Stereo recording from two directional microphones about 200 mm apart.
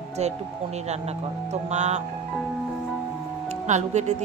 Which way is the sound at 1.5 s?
35° right (ahead or behind).